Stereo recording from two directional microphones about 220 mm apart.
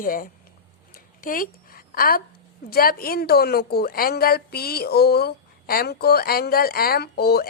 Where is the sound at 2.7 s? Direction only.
45° left (ahead or behind).